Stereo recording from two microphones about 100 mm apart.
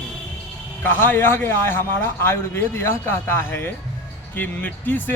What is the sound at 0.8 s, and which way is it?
A man's voice, 20° left (ahead or behind).